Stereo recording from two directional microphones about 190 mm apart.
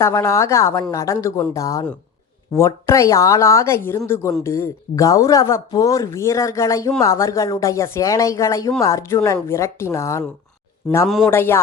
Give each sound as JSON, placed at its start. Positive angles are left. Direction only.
{"t": 0.0, "sound": "speech", "side_deg": 15}
{"t": 11.3, "sound": "speech", "side_deg": 10}